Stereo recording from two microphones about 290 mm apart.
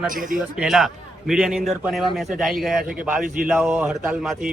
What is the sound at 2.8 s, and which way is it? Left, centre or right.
Speech, right.